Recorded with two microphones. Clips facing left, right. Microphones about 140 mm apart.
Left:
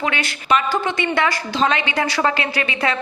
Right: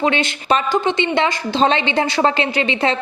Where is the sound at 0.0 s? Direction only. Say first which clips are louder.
Right 5 dB; 25° right (ahead or behind).